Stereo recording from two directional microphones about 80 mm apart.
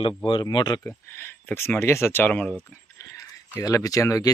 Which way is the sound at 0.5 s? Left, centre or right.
Left.